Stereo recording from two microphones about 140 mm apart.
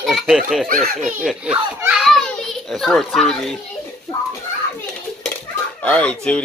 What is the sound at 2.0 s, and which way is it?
Children playing, 5° left (ahead or behind).